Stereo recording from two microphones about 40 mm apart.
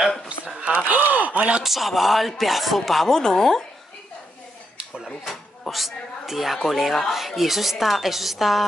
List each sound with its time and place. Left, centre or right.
0.6 s gasp: right
1.1 s gasp: right
1.6 s a woman's voice: centre
3.2 s a woman's voice: centre
5.0 s a woman's voice: centre